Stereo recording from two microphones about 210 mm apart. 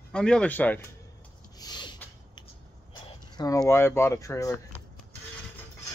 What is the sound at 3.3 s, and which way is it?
A man's voice, 15° left (ahead or behind).